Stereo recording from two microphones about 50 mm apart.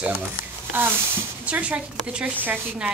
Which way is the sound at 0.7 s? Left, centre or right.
Right.